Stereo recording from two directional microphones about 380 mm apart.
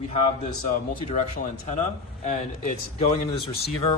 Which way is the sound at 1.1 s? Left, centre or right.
Centre.